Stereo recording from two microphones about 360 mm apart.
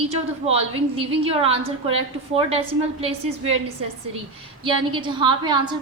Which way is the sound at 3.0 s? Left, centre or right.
Centre.